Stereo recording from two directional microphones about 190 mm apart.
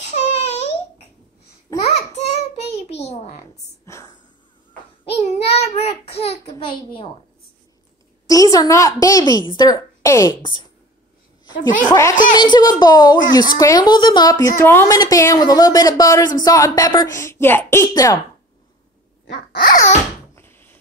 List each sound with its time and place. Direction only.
0.0 s babbling: 35° left (ahead or behind)
1.8 s a sound: 35° left (ahead or behind)
3.8 s whispering: 15° left (ahead or behind)
5.1 s child singing: 35° left (ahead or behind)
6.5 s a woman's voice: 25° left (ahead or behind)
8.3 s a woman's voice: 20° left (ahead or behind)
11.6 s a woman's voice: 20° left (ahead or behind)
19.2 s a sound: 60° left (ahead or behind)
20.3 s a sound: 10° left (ahead or behind)